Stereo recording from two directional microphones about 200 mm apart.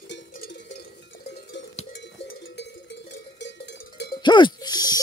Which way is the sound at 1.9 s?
60° left (ahead or behind).